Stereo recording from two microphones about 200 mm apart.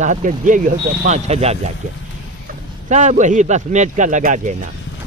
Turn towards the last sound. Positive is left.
turn(degrees=-40)  # may be behind; listen again after turning